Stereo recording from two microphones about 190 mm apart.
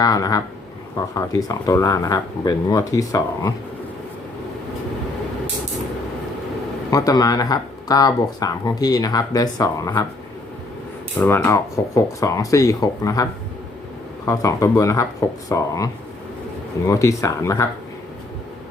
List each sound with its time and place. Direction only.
0.0 s speech: 20° left (ahead or behind)
6.9 s speech: 20° left (ahead or behind)
11.3 s speech: 15° left (ahead or behind)
14.3 s speech: 15° left (ahead or behind)